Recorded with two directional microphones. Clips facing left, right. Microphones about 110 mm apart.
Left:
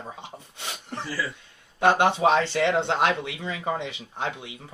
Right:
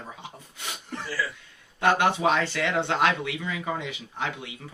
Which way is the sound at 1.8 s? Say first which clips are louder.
Left 2 dB; 25° left (ahead or behind).